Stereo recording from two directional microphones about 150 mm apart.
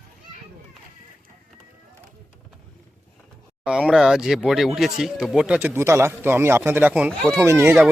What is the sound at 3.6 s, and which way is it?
Speech, 5° right (ahead or behind).